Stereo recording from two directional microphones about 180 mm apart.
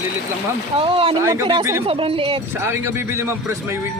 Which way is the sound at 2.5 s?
15° right (ahead or behind).